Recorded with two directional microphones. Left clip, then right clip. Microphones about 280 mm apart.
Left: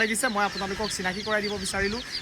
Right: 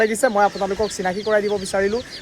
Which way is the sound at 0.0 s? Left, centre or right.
Centre.